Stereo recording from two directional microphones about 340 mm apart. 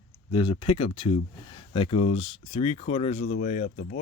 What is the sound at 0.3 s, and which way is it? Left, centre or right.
Speech, centre.